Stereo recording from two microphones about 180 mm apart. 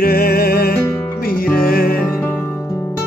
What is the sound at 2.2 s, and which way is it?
Music, 15° left (ahead or behind).